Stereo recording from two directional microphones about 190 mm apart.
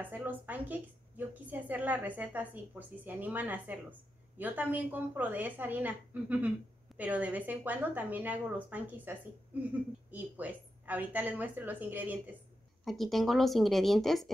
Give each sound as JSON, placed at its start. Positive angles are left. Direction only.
{"t": 0.0, "sound": "a woman's voice", "side_deg": -10}